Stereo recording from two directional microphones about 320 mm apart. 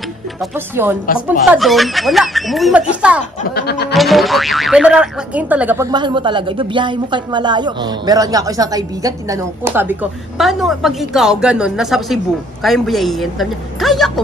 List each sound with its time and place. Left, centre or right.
0.4 s speech: centre
3.5 s music: left
3.9 s speech: centre